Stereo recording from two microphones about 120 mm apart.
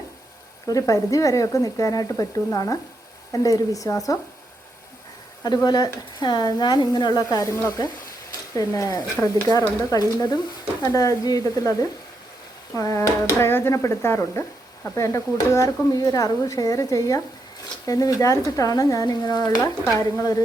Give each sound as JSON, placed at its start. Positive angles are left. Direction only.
{"t": 0.7, "sound": "speech", "side_deg": 30}
{"t": 5.6, "sound": "speech", "side_deg": 35}